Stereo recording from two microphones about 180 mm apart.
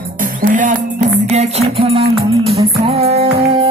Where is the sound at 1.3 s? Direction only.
35° right (ahead or behind).